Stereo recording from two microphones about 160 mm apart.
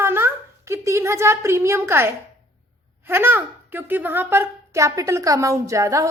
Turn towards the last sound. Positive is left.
turn(degrees=-20)  # may be behind; listen again after turning